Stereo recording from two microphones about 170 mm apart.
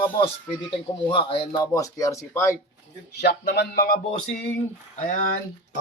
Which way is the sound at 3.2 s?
75° left (ahead or behind).